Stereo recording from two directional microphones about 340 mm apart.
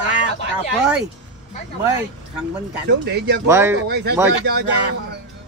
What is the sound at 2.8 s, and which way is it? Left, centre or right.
Speech, right.